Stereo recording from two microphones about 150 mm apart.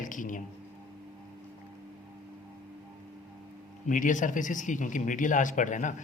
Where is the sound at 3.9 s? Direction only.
60° left (ahead or behind).